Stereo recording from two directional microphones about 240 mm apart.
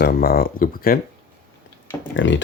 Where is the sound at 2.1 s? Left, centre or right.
Left.